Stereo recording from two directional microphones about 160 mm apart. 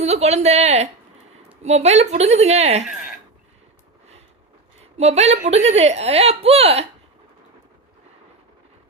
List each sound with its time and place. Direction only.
0.0 s a woman's voice: 40° right (ahead or behind)
4.9 s speech: 40° right (ahead or behind)